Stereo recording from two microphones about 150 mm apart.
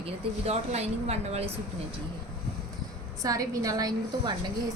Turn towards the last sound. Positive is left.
turn(degrees=-25)  # may be behind; listen again after turning